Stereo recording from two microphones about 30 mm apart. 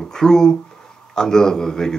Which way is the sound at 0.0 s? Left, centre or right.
Centre.